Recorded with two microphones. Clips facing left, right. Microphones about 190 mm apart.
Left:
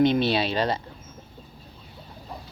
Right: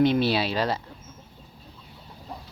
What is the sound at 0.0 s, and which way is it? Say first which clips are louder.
Speech: left 1 dB; 10° right (ahead or behind).